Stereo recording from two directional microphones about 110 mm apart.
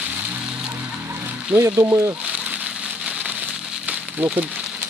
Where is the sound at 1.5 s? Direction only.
15° right (ahead or behind).